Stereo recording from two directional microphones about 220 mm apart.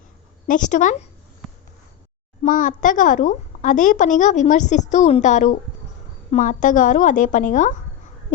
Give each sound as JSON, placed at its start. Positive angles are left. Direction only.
{"t": 0.4, "sound": "a child's voice", "side_deg": 35}
{"t": 2.4, "sound": "a child's voice", "side_deg": 35}